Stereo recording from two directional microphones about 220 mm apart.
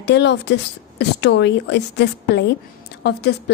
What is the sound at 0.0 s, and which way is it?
A woman's voice, 50° left (ahead or behind).